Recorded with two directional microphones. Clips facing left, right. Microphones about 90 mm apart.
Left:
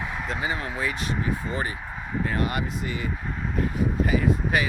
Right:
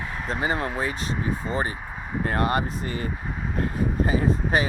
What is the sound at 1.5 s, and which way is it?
Speech, 30° right (ahead or behind).